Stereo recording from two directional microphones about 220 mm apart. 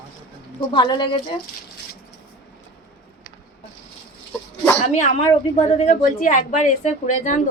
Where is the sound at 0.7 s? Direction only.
20° left (ahead or behind).